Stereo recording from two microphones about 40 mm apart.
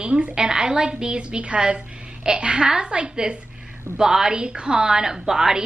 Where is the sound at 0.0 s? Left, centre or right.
Right.